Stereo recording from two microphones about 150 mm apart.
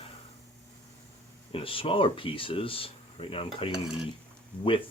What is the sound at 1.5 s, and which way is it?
Speech, 35° left (ahead or behind).